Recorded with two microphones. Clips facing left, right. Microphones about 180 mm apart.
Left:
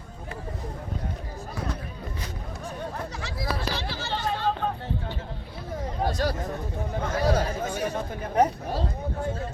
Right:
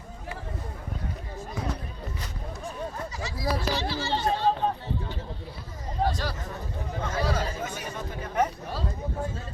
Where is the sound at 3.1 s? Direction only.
65° left (ahead or behind).